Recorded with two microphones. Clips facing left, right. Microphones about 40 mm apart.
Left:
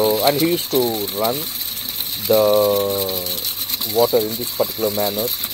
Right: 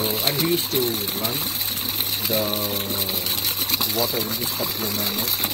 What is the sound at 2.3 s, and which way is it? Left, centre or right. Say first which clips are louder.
Speech: left 12 dB; left.